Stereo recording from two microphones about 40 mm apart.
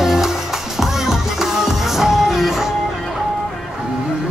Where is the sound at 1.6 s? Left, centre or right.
Centre.